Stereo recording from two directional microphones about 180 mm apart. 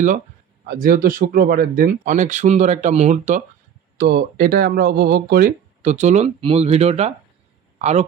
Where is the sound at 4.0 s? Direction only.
60° right (ahead or behind).